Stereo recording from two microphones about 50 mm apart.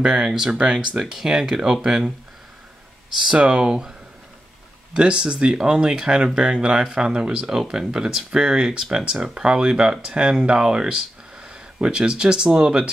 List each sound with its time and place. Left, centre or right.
0.0 s speech: centre
3.3 s speech: centre
4.9 s speech: centre